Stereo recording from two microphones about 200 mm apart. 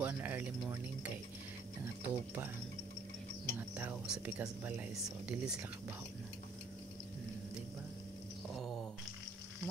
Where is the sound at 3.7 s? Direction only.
10° right (ahead or behind).